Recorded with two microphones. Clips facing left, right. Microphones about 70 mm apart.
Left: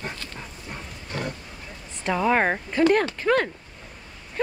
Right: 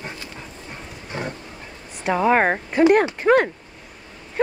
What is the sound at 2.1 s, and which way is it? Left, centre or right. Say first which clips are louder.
Speech: right 4 dB; centre.